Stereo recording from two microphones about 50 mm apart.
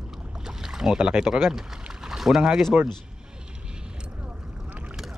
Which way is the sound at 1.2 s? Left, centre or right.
Centre.